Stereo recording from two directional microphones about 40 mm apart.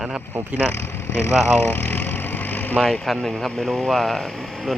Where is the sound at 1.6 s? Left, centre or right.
Left.